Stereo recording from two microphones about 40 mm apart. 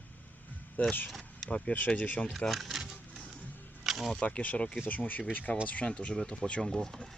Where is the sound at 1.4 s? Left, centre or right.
Left.